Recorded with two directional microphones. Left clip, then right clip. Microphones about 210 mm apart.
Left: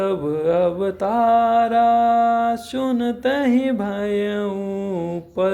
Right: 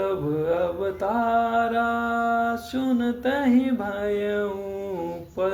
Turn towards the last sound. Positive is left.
turn(degrees=40)  # may be behind; listen again after turning